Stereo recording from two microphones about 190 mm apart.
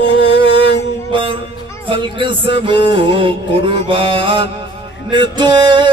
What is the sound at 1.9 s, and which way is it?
Music, 25° right (ahead or behind).